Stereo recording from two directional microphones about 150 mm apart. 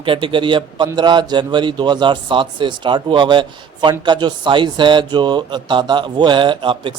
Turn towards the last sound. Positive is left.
turn(degrees=-35)  # may be behind; listen again after turning